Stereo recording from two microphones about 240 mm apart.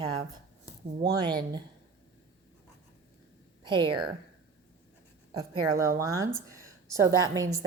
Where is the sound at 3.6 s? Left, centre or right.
Centre.